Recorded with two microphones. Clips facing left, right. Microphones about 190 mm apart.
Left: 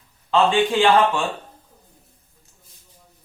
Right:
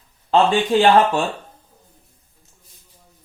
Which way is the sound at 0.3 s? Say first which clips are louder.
Right 2 dB; 40° right (ahead or behind).